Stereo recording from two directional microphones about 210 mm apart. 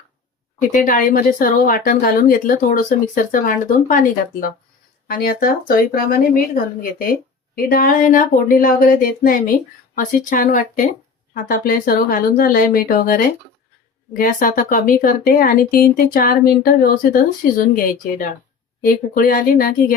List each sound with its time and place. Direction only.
0.7 s speech: 40° left (ahead or behind)